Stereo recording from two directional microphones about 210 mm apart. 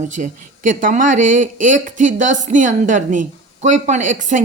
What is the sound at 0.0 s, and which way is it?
Speech, 35° right (ahead or behind).